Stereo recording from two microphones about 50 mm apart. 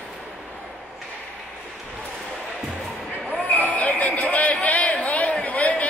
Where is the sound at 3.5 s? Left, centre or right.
Left.